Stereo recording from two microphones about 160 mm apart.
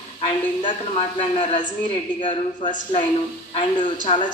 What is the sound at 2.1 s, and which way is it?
Speech, 30° left (ahead or behind).